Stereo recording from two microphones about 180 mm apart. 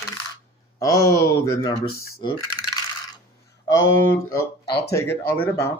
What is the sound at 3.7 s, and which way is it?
Speech, 15° left (ahead or behind).